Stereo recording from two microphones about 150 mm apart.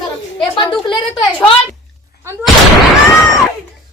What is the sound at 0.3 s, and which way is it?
Speech, 35° left (ahead or behind).